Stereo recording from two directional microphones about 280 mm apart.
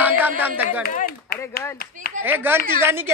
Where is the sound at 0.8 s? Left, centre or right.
Left.